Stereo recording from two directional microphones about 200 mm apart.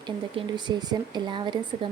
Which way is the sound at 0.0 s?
20° right (ahead or behind).